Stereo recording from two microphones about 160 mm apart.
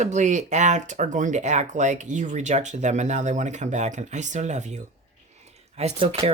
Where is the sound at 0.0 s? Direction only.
50° right (ahead or behind).